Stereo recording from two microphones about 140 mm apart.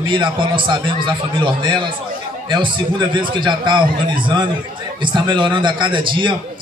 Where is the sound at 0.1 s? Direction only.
35° right (ahead or behind).